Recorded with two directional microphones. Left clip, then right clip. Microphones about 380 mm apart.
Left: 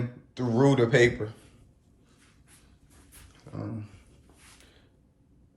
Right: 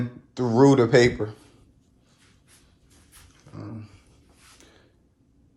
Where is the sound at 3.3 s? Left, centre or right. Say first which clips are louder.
Left 2 dB; centre.